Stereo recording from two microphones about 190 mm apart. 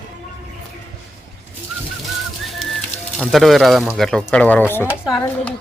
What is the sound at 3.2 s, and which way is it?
Speech, centre (ahead or behind).